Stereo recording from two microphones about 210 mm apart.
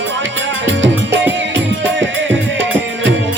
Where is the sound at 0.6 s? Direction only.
60° right (ahead or behind).